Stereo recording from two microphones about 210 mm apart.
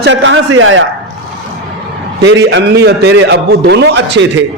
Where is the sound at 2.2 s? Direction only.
60° right (ahead or behind).